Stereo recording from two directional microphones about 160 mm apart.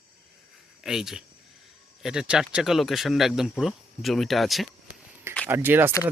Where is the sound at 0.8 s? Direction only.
5° right (ahead or behind).